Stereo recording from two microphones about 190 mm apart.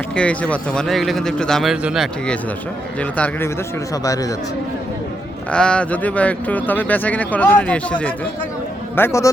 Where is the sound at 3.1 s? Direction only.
10° left (ahead or behind).